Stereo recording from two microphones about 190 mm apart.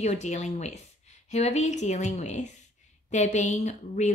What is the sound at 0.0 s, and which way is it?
Speech, 35° left (ahead or behind).